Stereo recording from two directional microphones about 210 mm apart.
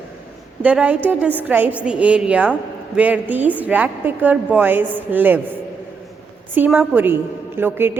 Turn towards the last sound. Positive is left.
turn(degrees=-10)  # may be behind; listen again after turning